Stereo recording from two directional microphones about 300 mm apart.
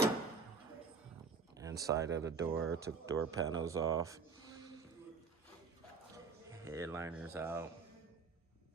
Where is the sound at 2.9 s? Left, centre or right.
Right.